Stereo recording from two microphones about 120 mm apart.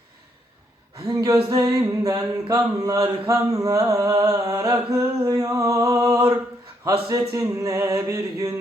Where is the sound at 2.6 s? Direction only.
30° right (ahead or behind).